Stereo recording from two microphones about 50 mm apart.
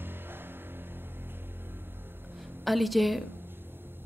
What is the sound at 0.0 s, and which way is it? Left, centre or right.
Music, right.